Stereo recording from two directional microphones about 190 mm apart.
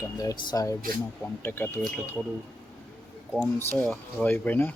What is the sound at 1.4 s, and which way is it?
Speech, 10° left (ahead or behind).